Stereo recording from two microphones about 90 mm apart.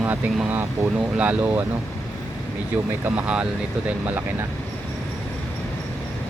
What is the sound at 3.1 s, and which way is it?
Speech, 15° right (ahead or behind).